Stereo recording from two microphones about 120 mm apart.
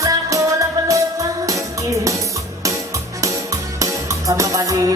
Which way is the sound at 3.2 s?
25° right (ahead or behind).